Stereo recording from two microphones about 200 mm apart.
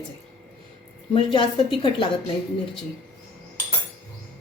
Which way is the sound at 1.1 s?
25° left (ahead or behind).